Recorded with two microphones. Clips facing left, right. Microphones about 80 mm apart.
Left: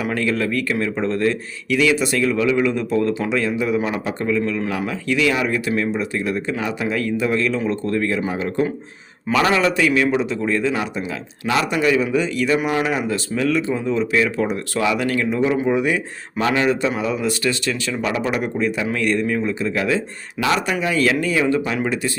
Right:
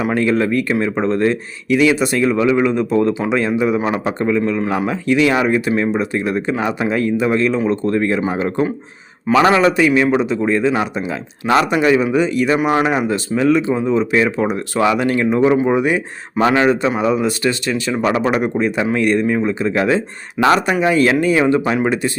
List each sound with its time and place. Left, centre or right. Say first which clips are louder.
0.0 s speech: right 5 dB; right
9.3 s speech: right 5 dB; right